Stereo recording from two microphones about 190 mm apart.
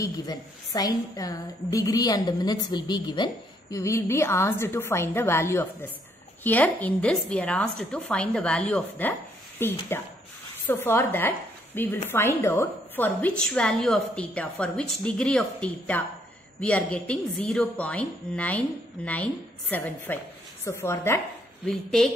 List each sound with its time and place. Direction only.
0.0 s a woman's voice: 20° left (ahead or behind)
21.6 s a woman's voice: 5° left (ahead or behind)